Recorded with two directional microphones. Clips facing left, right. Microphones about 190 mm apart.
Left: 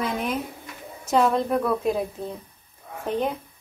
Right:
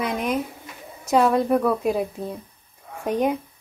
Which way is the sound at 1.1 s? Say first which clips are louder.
Right 3 dB; 5° right (ahead or behind).